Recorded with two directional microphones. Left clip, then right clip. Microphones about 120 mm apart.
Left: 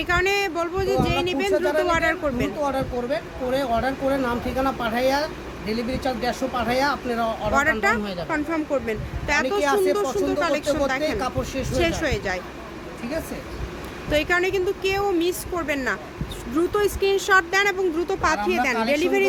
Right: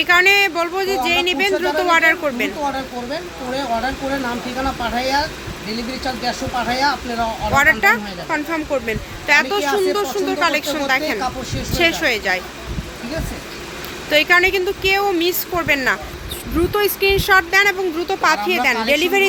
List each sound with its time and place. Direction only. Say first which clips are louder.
0.0 s speech: right 9 dB; 10° right (ahead or behind)
2.7 s speech: even; 45° left (ahead or behind)
4.6 s speech: right 2 dB; 35° left (ahead or behind)
7.5 s speech: right 8 dB; 10° right (ahead or behind)
9.6 s speech: right 2 dB; 35° left (ahead or behind)
9.9 s speech: right 3 dB; 10° right (ahead or behind)
14.1 s a woman's voice: right 8 dB; 10° right (ahead or behind)